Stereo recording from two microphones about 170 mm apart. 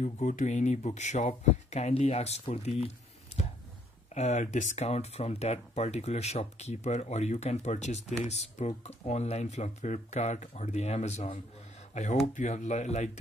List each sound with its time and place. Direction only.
0.0 s speech: 45° left (ahead or behind)
4.1 s speech: 40° left (ahead or behind)